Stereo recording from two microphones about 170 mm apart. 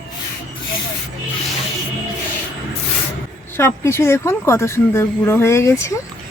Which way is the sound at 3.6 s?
15° left (ahead or behind).